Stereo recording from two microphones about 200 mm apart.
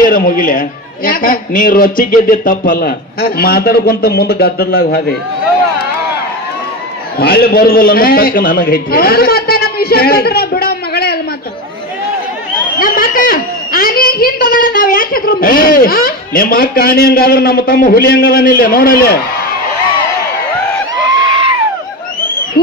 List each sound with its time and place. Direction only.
0.0 s a woman's voice: 45° left (ahead or behind)
7.2 s a woman's voice: 50° left (ahead or behind)
12.7 s a woman's voice: 45° left (ahead or behind)